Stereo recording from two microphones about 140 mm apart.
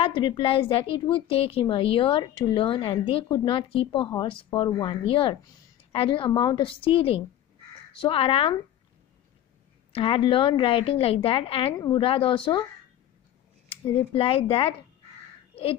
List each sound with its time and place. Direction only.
0.0 s a woman's voice: 35° left (ahead or behind)
9.9 s a woman's voice: 40° left (ahead or behind)
13.7 s a woman's voice: 40° left (ahead or behind)
15.5 s a sound: 45° left (ahead or behind)